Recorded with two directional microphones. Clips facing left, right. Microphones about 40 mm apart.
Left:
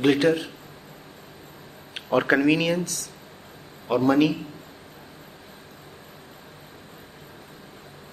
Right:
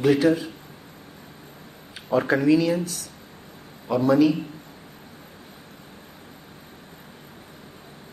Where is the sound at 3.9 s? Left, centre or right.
Left.